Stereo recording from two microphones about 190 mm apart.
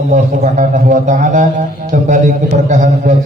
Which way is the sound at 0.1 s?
40° right (ahead or behind).